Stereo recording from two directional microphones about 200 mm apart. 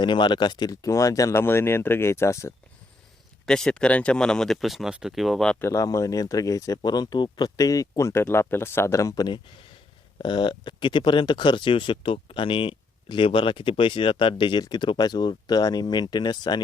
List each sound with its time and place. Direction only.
0.0 s speech: 25° left (ahead or behind)
3.4 s speech: 5° left (ahead or behind); by 16.6 s 20° left (ahead or behind)